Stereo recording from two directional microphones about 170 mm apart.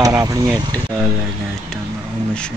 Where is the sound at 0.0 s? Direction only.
20° right (ahead or behind).